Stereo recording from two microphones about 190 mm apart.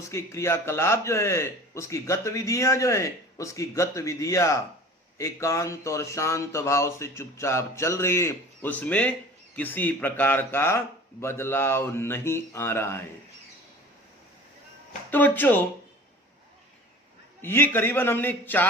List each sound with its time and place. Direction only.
0.1 s a man's voice: 15° left (ahead or behind)
15.1 s a man's voice: 10° left (ahead or behind)
17.4 s a man's voice: 10° left (ahead or behind)